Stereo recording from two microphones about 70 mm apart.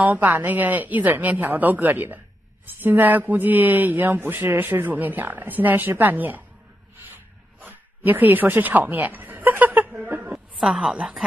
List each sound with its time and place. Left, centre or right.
0.0 s speech: right
7.6 s speech: right
10.0 s a sound: right
10.6 s a woman's voice: centre